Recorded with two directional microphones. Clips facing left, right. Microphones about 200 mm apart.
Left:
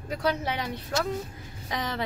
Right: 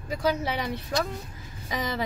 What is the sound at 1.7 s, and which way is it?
Speech, 5° right (ahead or behind).